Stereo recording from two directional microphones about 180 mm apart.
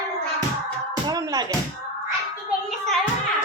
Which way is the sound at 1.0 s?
20° right (ahead or behind).